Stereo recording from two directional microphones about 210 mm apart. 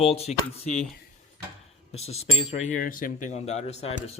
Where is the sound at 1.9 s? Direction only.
30° left (ahead or behind).